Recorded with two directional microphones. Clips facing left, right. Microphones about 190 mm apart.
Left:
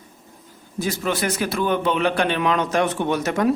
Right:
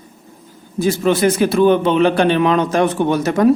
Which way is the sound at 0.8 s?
25° right (ahead or behind).